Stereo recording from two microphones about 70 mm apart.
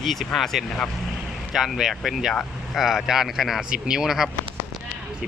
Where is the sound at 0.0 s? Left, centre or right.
Centre.